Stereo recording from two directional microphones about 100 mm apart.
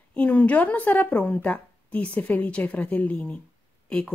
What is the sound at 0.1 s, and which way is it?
Speech, 15° left (ahead or behind).